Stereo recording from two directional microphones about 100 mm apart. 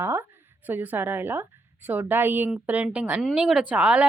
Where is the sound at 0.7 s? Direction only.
20° right (ahead or behind).